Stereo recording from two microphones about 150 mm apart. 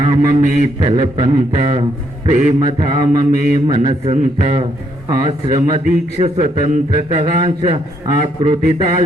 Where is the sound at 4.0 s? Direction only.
45° right (ahead or behind).